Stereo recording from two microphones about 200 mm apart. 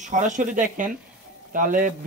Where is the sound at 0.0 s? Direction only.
40° right (ahead or behind).